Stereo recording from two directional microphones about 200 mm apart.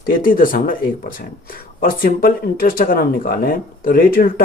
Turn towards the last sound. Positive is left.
turn(degrees=45)  # may be behind; listen again after turning